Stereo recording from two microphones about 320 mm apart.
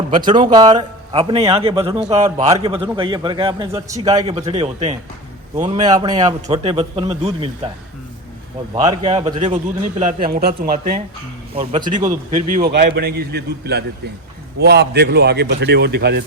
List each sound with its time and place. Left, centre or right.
0.1 s a man's voice: centre
8.7 s a man's voice: centre
11.5 s a man's voice: centre
12.9 s a man's voice: right